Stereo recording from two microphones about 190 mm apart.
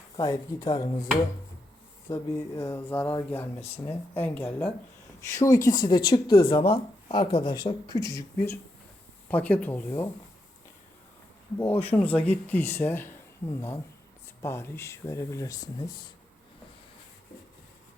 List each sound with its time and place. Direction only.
0.2 s speech: 20° left (ahead or behind)
2.0 s speech: 15° left (ahead or behind)
9.3 s speech: 5° left (ahead or behind)
11.6 s speech: 10° left (ahead or behind)